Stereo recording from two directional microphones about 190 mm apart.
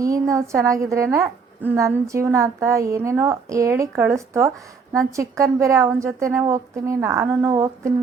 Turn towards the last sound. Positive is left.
turn(degrees=-15)  # may be behind; listen again after turning